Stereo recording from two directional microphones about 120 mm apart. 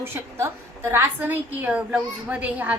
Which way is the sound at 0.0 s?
20° right (ahead or behind).